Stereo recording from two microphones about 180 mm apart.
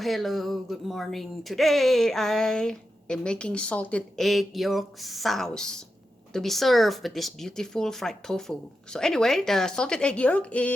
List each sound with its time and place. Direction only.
0.0 s speech: centre (ahead or behind)